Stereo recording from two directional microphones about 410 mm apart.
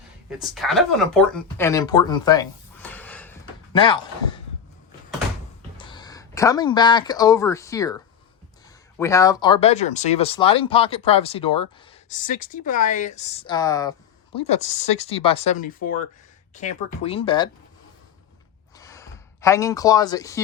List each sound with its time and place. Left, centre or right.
0.3 s speech: centre
5.7 s speech: centre
18.8 s a sound: centre